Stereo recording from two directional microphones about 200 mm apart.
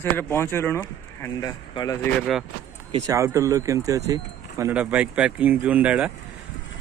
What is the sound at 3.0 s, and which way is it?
Speech, 15° right (ahead or behind).